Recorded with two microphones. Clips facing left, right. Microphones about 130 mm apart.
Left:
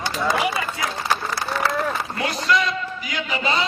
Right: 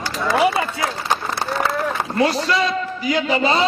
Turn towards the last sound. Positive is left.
turn(degrees=-35)  # may be behind; listen again after turning